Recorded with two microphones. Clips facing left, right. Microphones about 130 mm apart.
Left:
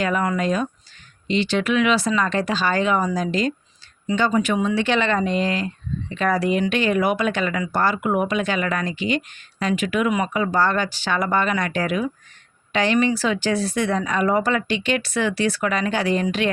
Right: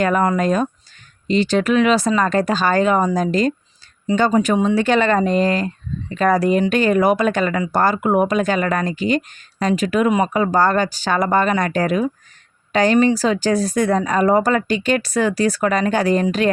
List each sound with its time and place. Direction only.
0.0 s speech: 45° right (ahead or behind)